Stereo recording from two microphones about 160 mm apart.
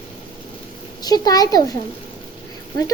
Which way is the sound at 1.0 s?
25° left (ahead or behind).